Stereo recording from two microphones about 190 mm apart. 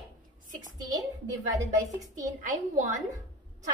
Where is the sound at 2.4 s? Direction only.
40° right (ahead or behind).